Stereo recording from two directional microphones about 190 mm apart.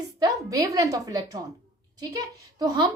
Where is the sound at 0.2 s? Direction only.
20° right (ahead or behind).